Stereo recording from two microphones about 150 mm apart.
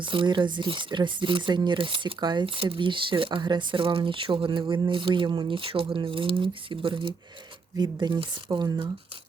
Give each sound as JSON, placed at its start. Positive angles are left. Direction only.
{"t": 0.0, "sound": "speech", "side_deg": -35}